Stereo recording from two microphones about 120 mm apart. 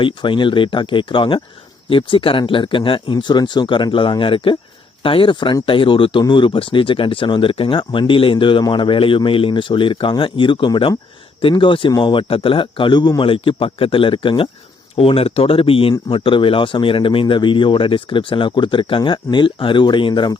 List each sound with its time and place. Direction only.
0.0 s speech: 40° left (ahead or behind)